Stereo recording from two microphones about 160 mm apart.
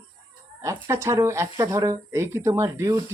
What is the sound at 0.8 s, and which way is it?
Speech, 15° right (ahead or behind).